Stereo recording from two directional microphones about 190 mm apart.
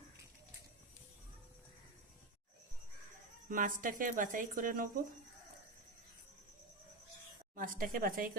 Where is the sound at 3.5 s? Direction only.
45° right (ahead or behind).